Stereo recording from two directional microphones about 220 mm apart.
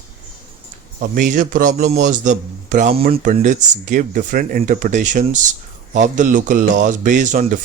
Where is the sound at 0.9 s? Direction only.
40° right (ahead or behind).